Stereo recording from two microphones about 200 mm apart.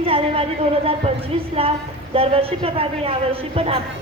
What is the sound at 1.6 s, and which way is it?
A woman's voice, 30° right (ahead or behind).